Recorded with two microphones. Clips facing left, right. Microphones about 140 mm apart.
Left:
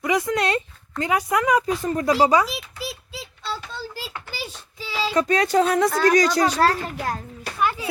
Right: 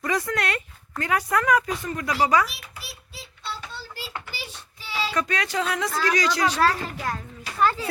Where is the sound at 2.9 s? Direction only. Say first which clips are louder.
Left 7 dB; 90° left.